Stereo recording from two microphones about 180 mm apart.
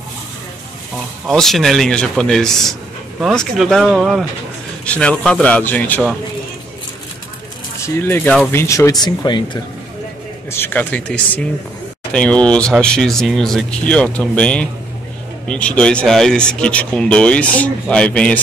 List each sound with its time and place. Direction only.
1.2 s a man's voice: centre (ahead or behind)
7.8 s a man's voice: 10° left (ahead or behind)
10.5 s a man's voice: 10° left (ahead or behind)